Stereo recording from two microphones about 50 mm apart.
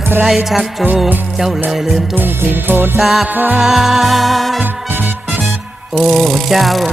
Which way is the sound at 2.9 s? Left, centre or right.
Centre.